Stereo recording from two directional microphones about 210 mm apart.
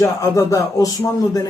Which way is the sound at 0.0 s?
15° left (ahead or behind).